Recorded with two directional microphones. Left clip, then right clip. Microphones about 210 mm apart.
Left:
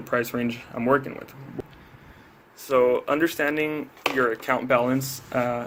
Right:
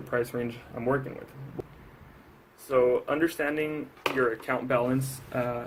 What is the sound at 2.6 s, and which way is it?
Speech, 40° left (ahead or behind).